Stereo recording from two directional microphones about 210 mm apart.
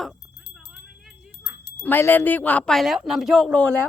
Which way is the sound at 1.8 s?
10° left (ahead or behind).